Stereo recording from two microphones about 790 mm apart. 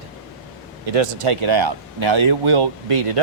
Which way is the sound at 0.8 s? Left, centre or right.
Right.